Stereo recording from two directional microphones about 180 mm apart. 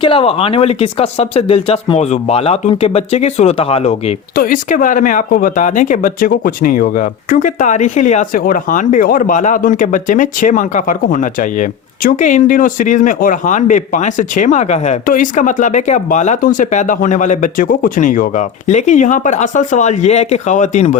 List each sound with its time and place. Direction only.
0.0 s speech: 30° left (ahead or behind)
4.4 s speech: 50° left (ahead or behind)